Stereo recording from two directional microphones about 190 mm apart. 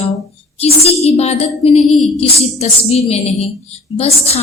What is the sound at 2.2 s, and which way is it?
A woman's voice, 35° left (ahead or behind).